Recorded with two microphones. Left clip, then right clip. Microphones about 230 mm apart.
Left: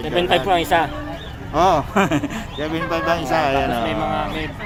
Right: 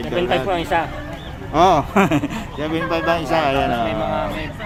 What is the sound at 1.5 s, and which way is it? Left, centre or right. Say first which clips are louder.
Speech: right 2 dB; centre.